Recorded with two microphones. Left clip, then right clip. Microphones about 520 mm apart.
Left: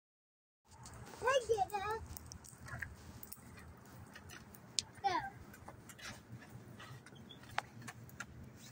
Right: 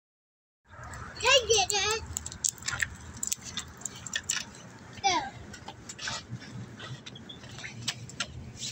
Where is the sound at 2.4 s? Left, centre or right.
Centre.